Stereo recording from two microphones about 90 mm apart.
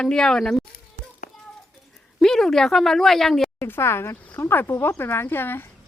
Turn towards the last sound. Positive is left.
turn(degrees=25)  # may be behind; listen again after turning